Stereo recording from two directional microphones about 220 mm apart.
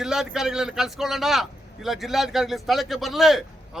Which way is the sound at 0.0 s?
Centre (ahead or behind).